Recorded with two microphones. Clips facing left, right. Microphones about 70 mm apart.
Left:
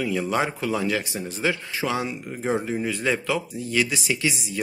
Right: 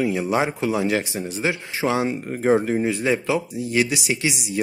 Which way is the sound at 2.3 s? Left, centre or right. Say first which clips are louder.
Right 7 dB; right.